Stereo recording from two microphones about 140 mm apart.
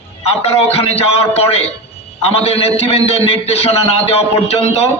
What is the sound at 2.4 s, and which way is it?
A man's voice, 45° left (ahead or behind).